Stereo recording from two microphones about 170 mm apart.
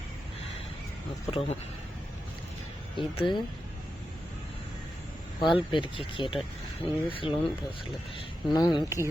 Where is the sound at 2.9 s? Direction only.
30° left (ahead or behind).